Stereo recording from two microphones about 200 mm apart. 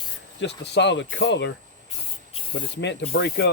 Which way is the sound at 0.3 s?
60° left (ahead or behind).